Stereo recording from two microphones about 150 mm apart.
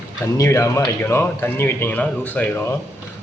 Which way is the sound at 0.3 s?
20° left (ahead or behind).